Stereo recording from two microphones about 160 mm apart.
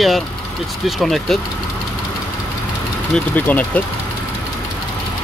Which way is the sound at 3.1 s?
10° left (ahead or behind).